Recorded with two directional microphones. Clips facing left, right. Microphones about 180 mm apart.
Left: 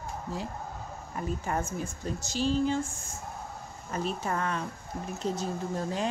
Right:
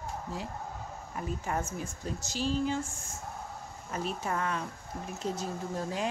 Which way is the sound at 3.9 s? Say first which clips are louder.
Left 2 dB; 5° right (ahead or behind).